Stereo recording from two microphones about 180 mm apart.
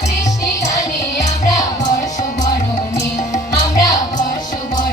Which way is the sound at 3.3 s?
20° left (ahead or behind).